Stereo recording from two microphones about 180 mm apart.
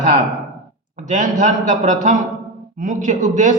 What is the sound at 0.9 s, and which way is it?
A man's voice, 40° right (ahead or behind).